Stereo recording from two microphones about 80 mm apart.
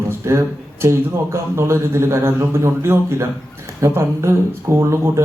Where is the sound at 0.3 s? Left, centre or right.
Right.